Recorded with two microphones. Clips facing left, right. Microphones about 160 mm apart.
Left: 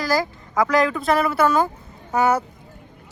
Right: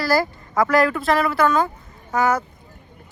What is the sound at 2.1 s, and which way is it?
Speech, 30° left (ahead or behind).